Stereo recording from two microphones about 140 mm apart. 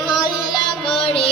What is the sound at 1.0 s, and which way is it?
Music, 40° left (ahead or behind).